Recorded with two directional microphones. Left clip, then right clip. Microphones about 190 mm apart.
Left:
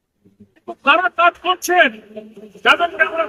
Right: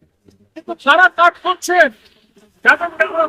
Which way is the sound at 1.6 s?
30° right (ahead or behind).